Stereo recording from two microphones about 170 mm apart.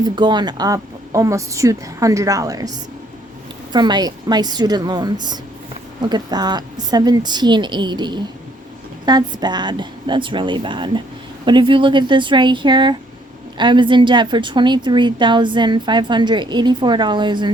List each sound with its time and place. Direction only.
0.0 s a woman's voice: 25° right (ahead or behind)